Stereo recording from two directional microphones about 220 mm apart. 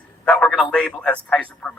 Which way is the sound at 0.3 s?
5° left (ahead or behind).